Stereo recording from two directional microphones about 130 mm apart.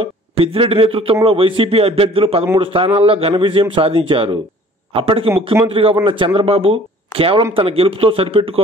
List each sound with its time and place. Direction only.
0.0 s speech: 45° right (ahead or behind)
5.3 s speech: 20° right (ahead or behind)
5.7 s speech: 45° right (ahead or behind)